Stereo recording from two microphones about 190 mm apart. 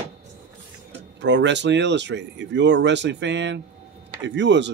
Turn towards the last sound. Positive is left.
turn(degrees=-70)  # may be behind; listen again after turning